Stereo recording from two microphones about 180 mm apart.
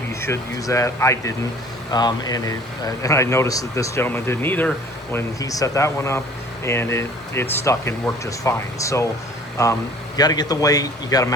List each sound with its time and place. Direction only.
0.1 s a man's voice: 15° left (ahead or behind)
10.2 s speech: 20° left (ahead or behind)